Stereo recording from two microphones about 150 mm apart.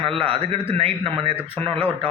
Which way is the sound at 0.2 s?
35° right (ahead or behind).